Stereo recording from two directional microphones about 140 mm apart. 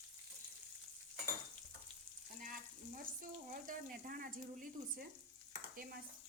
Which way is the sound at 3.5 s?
85° right.